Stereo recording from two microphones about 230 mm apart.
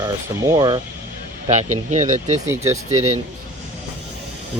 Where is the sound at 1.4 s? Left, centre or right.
Right.